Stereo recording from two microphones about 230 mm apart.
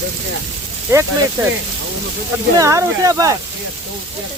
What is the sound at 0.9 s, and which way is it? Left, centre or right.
Speech, centre.